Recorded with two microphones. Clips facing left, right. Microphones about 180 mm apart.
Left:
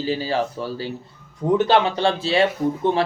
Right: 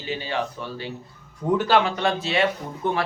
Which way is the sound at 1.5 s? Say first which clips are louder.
Left 3 dB; 25° left (ahead or behind).